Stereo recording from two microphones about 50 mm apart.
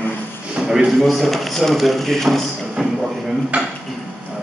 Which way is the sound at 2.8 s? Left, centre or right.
Centre.